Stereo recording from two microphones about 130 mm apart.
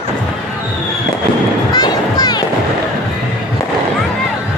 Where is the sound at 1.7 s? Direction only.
30° left (ahead or behind).